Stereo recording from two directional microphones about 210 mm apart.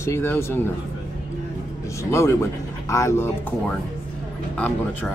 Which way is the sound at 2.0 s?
15° left (ahead or behind).